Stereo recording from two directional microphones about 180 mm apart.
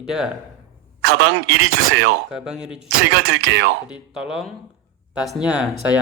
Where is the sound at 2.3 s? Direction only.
5° right (ahead or behind).